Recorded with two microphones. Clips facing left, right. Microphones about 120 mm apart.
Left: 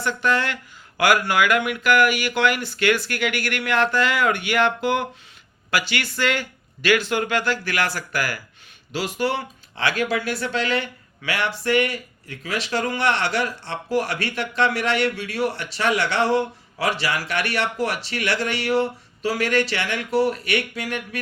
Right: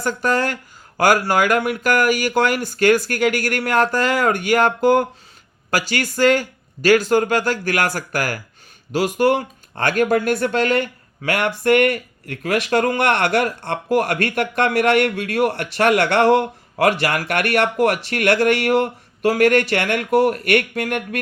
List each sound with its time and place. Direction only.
0.0 s speech: 40° right (ahead or behind)